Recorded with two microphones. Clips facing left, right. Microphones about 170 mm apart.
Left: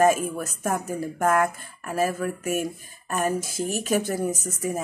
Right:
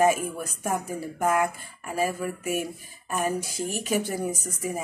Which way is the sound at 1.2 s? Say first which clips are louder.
Left 2 dB; 50° left (ahead or behind).